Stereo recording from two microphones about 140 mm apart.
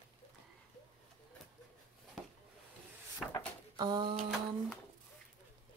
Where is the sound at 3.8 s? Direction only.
30° right (ahead or behind).